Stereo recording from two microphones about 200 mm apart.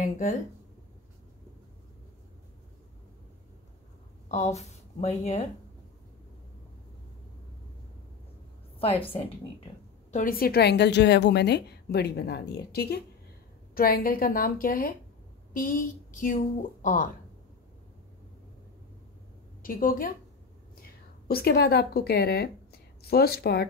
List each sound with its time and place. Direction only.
0.0 s a woman's voice: 40° left (ahead or behind)
4.3 s speech: 35° left (ahead or behind)
10.1 s a woman's voice: 45° left (ahead or behind)
19.6 s a woman's voice: 45° left (ahead or behind)
21.3 s a woman's voice: 50° left (ahead or behind)